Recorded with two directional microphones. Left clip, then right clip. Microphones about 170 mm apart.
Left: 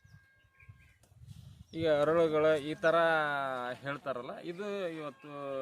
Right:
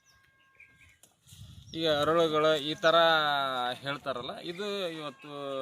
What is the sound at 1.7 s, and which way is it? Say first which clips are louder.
Speech: right 2 dB; 30° left (ahead or behind).